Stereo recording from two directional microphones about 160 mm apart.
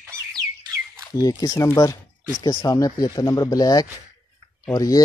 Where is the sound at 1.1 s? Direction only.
20° left (ahead or behind).